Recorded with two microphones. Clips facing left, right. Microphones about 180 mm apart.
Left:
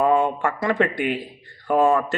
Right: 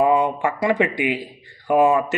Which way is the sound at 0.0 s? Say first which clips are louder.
Right 1 dB; 15° right (ahead or behind).